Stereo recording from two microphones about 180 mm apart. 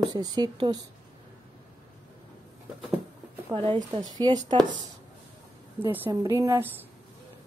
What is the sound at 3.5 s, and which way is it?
Speech, 25° right (ahead or behind).